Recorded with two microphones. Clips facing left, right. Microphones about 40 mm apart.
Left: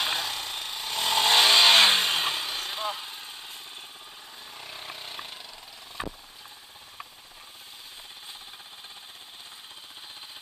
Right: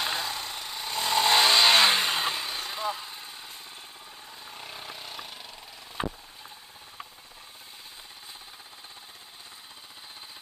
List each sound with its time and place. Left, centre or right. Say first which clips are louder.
0.0 s vehicle: left 1 dB; left
4.7 s vehicle: left 2 dB; centre
5.0 s wood: left 1 dB; left